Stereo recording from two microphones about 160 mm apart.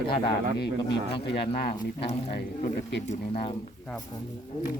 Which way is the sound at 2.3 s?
80° left.